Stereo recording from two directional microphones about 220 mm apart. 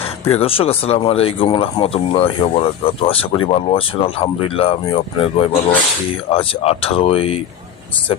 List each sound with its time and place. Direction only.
0.0 s speech: 25° left (ahead or behind)